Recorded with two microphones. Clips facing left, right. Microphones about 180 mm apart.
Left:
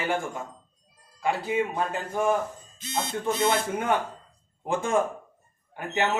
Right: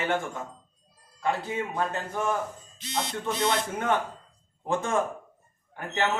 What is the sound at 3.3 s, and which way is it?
Speech, centre (ahead or behind).